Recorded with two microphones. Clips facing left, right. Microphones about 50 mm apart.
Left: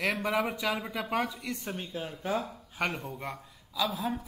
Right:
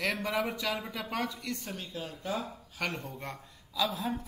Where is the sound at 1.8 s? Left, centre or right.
Left; by 4.2 s centre.